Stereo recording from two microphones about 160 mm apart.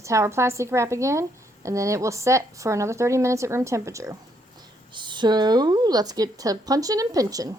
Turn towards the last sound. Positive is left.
turn(degrees=-20)  # may be behind; listen again after turning